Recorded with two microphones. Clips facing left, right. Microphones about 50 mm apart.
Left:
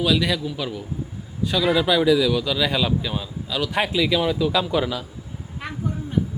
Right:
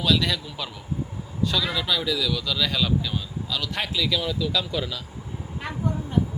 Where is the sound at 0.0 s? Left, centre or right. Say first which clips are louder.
Left 3 dB; centre.